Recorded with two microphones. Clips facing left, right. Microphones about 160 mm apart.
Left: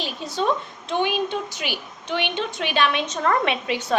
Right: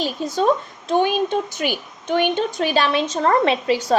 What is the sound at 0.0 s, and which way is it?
A woman's voice, 45° right (ahead or behind).